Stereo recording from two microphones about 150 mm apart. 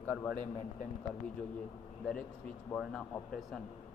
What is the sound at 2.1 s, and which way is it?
A man's voice, 5° left (ahead or behind).